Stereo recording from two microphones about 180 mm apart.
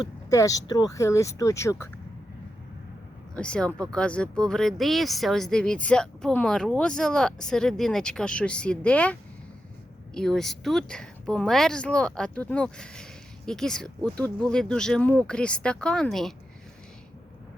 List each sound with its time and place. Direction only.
0.0 s speech: 20° left (ahead or behind)
3.3 s speech: 5° left (ahead or behind)
10.2 s speech: 5° left (ahead or behind)